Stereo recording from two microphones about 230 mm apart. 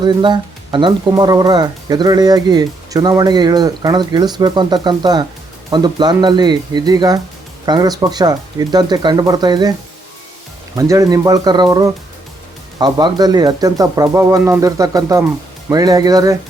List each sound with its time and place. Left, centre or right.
0.0 s speech: centre
10.8 s speech: centre